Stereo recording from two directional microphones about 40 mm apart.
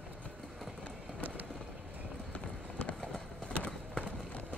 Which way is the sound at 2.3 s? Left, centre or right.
Left.